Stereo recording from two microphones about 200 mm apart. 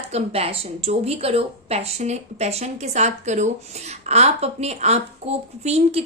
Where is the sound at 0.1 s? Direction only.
30° right (ahead or behind).